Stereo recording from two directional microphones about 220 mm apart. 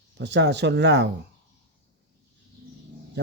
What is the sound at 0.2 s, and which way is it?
Speech, 50° right (ahead or behind).